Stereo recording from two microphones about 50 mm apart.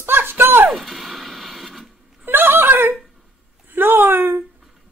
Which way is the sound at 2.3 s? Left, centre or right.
Right.